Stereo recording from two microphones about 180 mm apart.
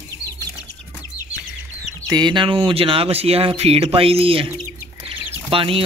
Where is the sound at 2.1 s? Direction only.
25° right (ahead or behind).